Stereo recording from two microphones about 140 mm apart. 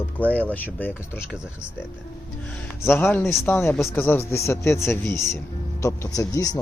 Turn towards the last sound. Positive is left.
turn(degrees=25)  # may be behind; listen again after turning